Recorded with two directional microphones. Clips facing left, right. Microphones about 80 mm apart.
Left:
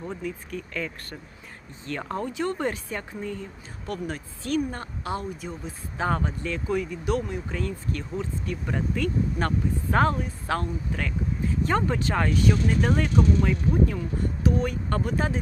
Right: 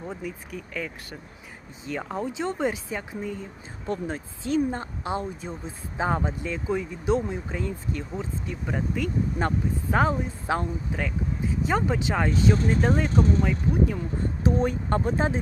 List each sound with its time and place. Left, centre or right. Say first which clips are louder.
0.0 s speech: left 1 dB; centre
3.8 s speech: right 2 dB; right
13.1 s speech: even; right
13.4 s speech: left 1 dB; centre
14.4 s speech: right 2 dB; right